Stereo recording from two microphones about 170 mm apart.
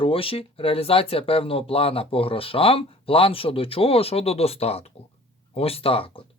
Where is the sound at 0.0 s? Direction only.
30° left (ahead or behind).